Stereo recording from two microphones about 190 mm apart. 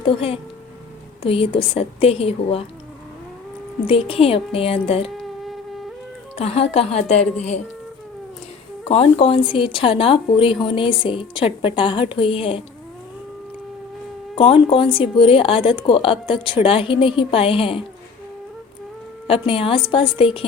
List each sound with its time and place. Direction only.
0.0 s a woman's voice: 30° left (ahead or behind)
3.8 s a woman's voice: 30° left (ahead or behind)
6.3 s a woman's voice: 35° left (ahead or behind)
8.9 s a woman's voice: 30° left (ahead or behind)
14.3 s a woman's voice: 30° left (ahead or behind)
19.3 s a woman's voice: 30° left (ahead or behind)